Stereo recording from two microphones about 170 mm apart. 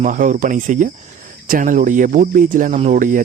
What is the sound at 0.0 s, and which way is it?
Speech, 50° right (ahead or behind).